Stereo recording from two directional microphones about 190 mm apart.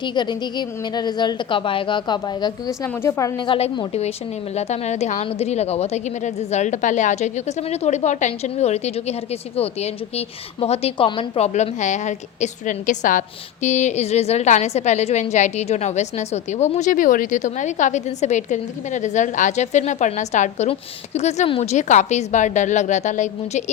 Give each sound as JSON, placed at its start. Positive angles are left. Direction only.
{"t": 0.0, "sound": "a woman's voice", "side_deg": 25}